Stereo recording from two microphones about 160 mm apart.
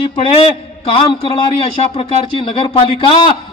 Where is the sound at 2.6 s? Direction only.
35° left (ahead or behind).